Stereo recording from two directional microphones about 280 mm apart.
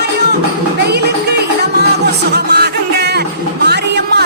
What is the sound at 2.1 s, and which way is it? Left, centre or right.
Music, right.